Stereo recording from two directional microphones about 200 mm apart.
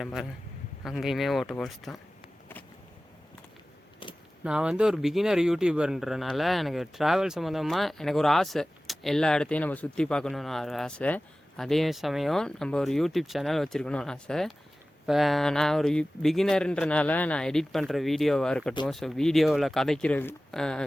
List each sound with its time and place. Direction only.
0.0 s speech: centre (ahead or behind)
4.0 s a sound: 25° left (ahead or behind)
4.4 s speech: 5° right (ahead or behind)